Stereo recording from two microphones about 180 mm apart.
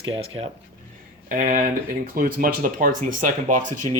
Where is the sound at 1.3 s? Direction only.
45° right (ahead or behind).